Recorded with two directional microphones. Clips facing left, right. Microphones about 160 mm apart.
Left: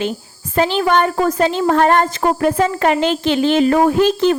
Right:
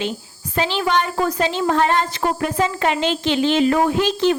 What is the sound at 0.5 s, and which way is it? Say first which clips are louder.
A woman's voice: left 5 dB; 50° left (ahead or behind).